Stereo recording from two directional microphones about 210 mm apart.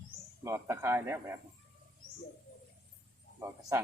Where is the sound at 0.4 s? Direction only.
15° right (ahead or behind).